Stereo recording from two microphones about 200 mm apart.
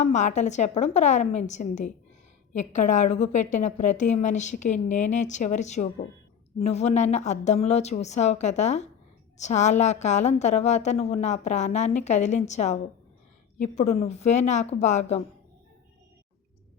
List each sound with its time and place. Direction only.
0.0 s a woman's voice: 35° left (ahead or behind)